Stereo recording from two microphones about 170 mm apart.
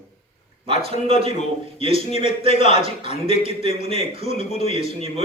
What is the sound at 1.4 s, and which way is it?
A man's voice, 40° left (ahead or behind).